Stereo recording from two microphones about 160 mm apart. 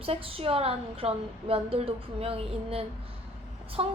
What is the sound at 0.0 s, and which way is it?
A woman's voice, 35° right (ahead or behind).